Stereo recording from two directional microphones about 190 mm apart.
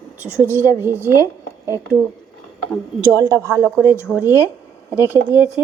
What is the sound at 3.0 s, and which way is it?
Speech, 15° right (ahead or behind).